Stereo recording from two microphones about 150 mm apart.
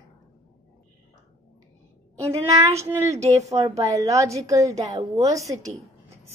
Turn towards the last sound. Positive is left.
turn(degrees=-20)  # may be behind; listen again after turning